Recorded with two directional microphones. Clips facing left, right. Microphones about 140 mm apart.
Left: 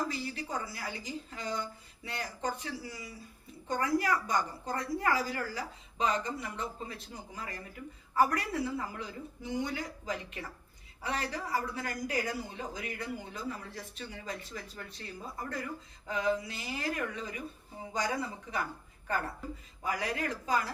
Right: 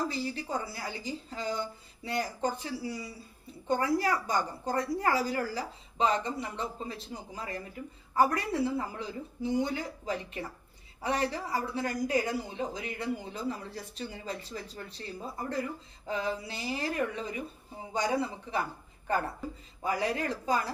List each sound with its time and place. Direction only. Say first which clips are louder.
0.1 s a woman's voice: right 3 dB; 30° right (ahead or behind)
19.8 s speech: right 4 dB; 30° right (ahead or behind)